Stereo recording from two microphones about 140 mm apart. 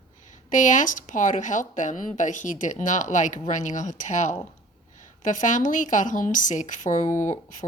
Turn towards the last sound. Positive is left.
turn(degrees=60)  # may be behind; listen again after turning